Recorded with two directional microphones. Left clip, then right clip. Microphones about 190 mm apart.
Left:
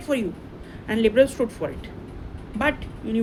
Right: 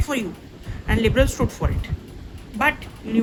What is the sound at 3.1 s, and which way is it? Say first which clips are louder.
Speech: right 3 dB; 20° right (ahead or behind).